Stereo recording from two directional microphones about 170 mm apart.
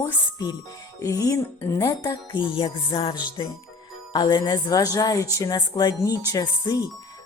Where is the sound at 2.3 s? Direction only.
30° left (ahead or behind).